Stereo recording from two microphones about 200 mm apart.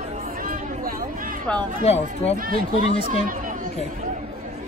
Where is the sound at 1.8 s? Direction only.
30° left (ahead or behind).